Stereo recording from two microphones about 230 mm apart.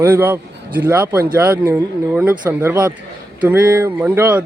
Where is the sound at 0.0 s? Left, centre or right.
Centre.